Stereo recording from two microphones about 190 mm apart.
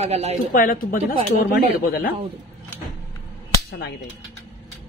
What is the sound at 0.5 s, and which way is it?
Speech, 50° left (ahead or behind).